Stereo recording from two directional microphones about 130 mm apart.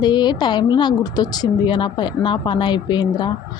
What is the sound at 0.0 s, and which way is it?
A woman's voice, 35° left (ahead or behind).